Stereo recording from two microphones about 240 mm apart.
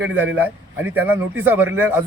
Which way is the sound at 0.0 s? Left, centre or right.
Centre.